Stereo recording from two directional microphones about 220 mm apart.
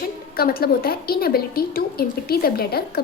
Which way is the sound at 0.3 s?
40° left (ahead or behind).